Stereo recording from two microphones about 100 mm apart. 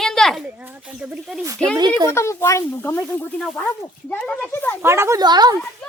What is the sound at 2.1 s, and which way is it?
Speech, 25° left (ahead or behind).